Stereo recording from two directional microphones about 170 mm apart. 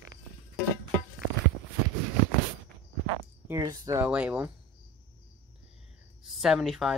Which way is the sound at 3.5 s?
20° right (ahead or behind).